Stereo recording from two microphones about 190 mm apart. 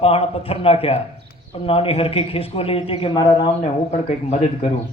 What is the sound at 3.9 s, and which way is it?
Speech, 35° left (ahead or behind).